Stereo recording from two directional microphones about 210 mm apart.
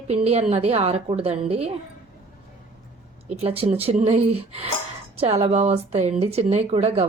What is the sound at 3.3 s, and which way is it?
A woman's voice, 30° right (ahead or behind).